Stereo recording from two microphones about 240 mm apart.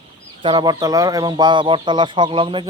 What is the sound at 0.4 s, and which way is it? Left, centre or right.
Speech, centre.